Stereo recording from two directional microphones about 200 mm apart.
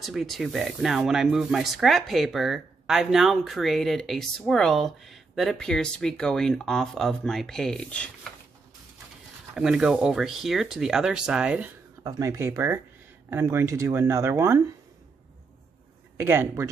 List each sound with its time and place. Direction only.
0.0 s speech: centre (ahead or behind)
9.5 s speech: centre (ahead or behind)
12.0 s speech: 15° right (ahead or behind)
16.2 s speech: 10° right (ahead or behind)